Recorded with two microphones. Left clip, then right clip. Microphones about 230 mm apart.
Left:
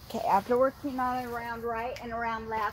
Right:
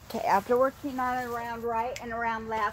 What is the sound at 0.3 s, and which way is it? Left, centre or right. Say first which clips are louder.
Speech: right 1 dB; right.